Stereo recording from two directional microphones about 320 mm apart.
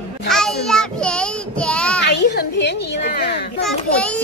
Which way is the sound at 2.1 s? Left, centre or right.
Left.